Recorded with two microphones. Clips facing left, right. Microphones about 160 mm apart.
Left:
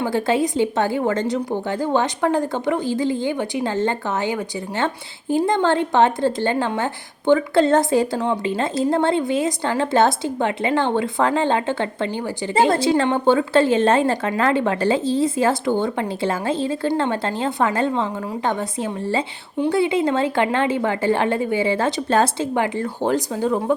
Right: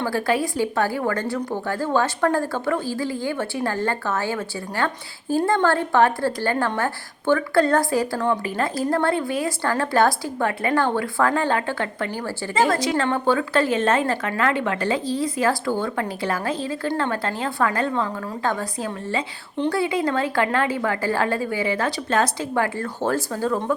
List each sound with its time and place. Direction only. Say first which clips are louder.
0.0 s a woman's voice: left 3 dB; 20° left (ahead or behind)